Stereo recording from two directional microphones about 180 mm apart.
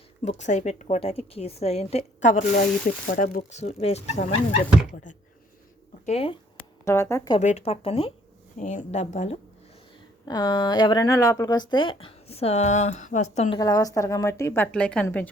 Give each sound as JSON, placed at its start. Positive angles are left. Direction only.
{"t": 0.3, "sound": "a woman's voice", "side_deg": 40}
{"t": 6.1, "sound": "a woman's voice", "side_deg": 30}
{"t": 6.8, "sound": "speech", "side_deg": 15}
{"t": 7.3, "sound": "a woman's voice", "side_deg": 40}
{"t": 10.2, "sound": "speech", "side_deg": 20}
{"t": 13.6, "sound": "speech", "side_deg": 20}